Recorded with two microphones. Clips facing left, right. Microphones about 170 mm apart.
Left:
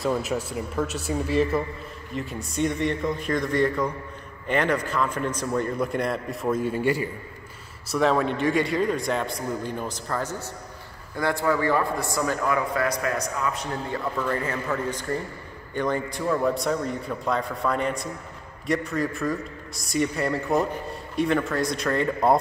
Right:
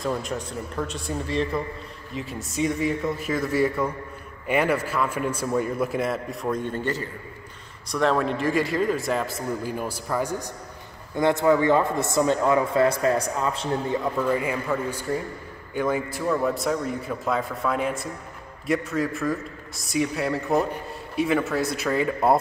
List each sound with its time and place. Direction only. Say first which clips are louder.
0.0 s a man's voice: left 2 dB; 5° left (ahead or behind); by 13.7 s 30° right (ahead or behind)
13.9 s a man's voice: right 1 dB; 10° right (ahead or behind)